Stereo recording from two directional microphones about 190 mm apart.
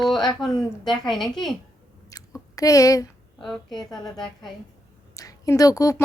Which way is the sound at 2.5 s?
20° left (ahead or behind).